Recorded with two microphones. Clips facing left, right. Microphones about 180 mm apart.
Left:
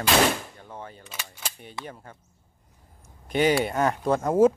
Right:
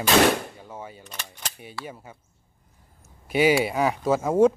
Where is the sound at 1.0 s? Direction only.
10° left (ahead or behind).